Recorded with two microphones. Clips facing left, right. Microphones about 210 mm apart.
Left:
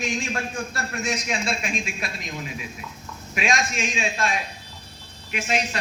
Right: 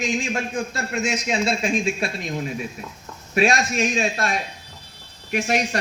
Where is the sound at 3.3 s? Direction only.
35° right (ahead or behind).